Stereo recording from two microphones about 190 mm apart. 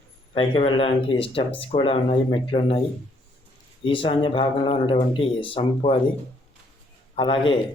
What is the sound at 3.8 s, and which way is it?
Speech, 25° left (ahead or behind).